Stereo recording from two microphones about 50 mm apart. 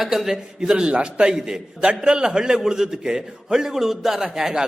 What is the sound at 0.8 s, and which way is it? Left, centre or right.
A man's voice, right.